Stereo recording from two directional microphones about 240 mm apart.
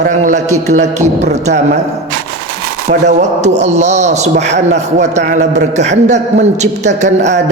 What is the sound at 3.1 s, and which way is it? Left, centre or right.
A man's voice, right.